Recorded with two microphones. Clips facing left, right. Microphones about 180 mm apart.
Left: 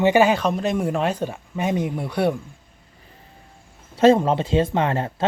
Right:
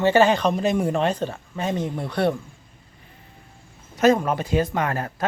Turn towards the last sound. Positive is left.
turn(degrees=25)  # may be behind; listen again after turning